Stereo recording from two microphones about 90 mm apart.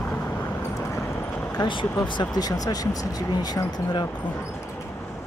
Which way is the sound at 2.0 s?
50° left (ahead or behind).